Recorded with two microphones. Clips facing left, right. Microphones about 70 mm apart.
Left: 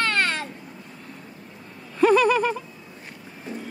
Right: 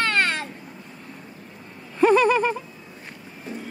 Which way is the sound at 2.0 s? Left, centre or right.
Right.